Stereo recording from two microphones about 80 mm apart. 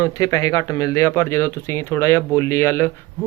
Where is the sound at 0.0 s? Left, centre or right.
Left.